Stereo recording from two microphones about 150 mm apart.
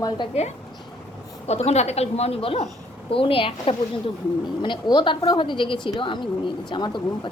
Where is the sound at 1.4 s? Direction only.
45° left (ahead or behind).